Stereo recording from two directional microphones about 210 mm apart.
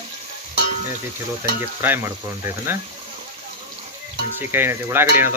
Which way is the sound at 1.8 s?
10° right (ahead or behind).